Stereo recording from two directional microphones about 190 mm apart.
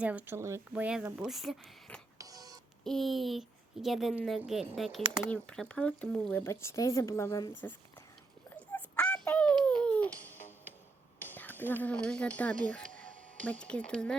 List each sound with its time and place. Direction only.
0.0 s speech: 10° right (ahead or behind)
2.1 s music: 20° right (ahead or behind)
2.8 s a woman's voice: centre (ahead or behind)
8.4 s babbling: 10° left (ahead or behind)
10.2 s music: 10° left (ahead or behind)
11.2 s speech: 10° left (ahead or behind)